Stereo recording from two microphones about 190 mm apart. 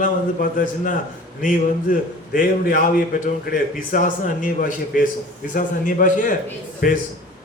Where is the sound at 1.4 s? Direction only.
45° left (ahead or behind).